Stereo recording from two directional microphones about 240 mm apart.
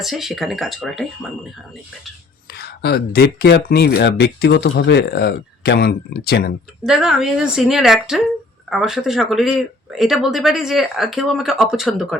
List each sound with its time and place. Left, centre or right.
0.0 s speech: centre
2.5 s speech: left
6.8 s speech: centre